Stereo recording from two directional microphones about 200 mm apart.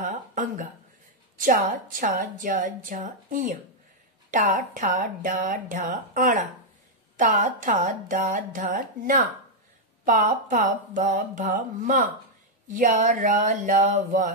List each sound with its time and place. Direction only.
0.0 s a woman's voice: 40° right (ahead or behind)